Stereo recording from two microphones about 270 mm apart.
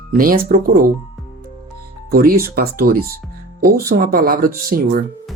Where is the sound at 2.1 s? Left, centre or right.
Right.